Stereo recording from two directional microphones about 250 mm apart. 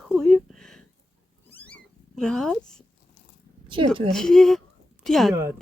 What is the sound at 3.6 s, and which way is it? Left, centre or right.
Speech, centre.